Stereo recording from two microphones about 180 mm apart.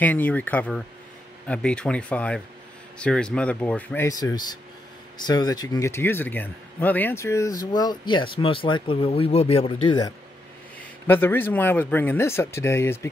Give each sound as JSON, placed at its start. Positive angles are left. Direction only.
{"t": 0.0, "sound": "speech", "side_deg": 10}
{"t": 11.1, "sound": "speech", "side_deg": 10}